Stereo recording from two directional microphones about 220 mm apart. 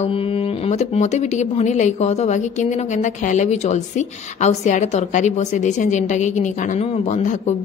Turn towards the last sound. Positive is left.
turn(degrees=30)  # may be behind; listen again after turning